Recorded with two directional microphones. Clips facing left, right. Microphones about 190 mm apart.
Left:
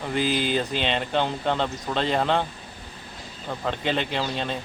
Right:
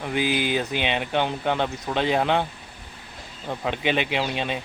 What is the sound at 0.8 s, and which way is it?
Speech, 10° right (ahead or behind).